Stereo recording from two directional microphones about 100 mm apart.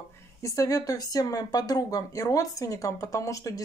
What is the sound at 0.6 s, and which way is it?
Speech, 35° left (ahead or behind).